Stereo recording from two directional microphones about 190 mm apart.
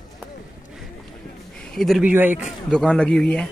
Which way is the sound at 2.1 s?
10° right (ahead or behind).